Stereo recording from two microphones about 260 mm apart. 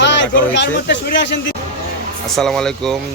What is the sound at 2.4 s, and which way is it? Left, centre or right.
Speech, centre.